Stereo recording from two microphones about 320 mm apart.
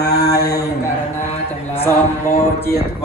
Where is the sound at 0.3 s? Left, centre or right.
Centre.